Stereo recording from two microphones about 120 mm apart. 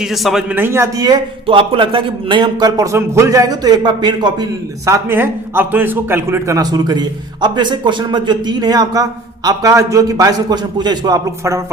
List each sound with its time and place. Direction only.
0.0 s a man's voice: centre (ahead or behind)
0.4 s a man's voice: 15° right (ahead or behind); by 1.2 s 30° right (ahead or behind)
1.5 s speech: 45° right (ahead or behind)
4.9 s a man's voice: 20° right (ahead or behind)